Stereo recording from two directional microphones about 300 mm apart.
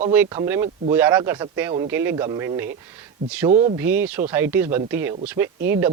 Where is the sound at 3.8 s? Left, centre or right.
Centre.